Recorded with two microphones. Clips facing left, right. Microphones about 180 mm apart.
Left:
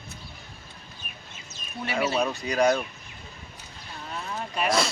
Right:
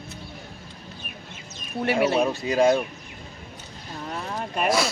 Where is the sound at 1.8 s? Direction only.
60° right (ahead or behind).